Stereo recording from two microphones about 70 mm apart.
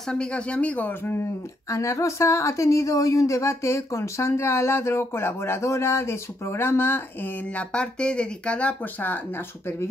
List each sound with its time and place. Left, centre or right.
0.1 s speech: centre
1.7 s speech: left
7.5 s speech: centre